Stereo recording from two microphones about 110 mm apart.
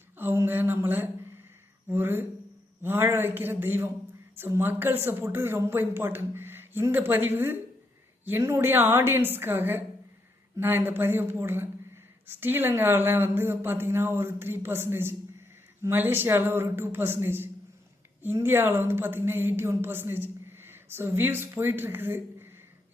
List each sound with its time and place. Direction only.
0.2 s speech: 20° right (ahead or behind)